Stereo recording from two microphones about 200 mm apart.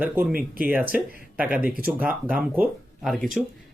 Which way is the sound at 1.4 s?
10° right (ahead or behind).